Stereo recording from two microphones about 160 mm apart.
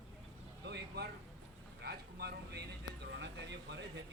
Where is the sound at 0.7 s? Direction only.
90° right.